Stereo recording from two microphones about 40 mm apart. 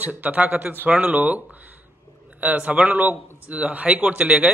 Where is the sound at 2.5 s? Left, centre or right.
Right.